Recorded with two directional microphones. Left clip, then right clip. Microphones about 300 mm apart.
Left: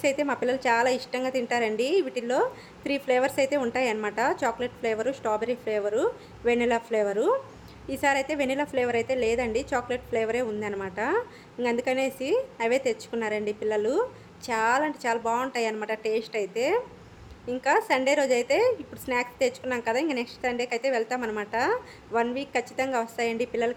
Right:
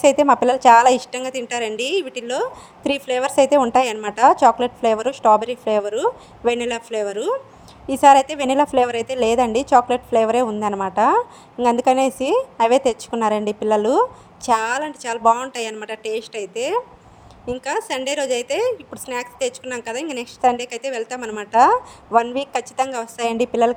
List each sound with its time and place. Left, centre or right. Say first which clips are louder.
0.0 s a woman's voice: right 12 dB; right